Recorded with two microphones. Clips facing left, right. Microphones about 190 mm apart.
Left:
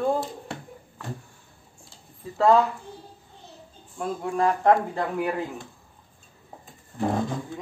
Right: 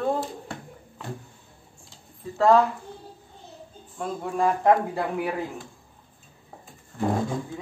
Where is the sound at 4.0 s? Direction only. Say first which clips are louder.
Left 1 dB; centre (ahead or behind).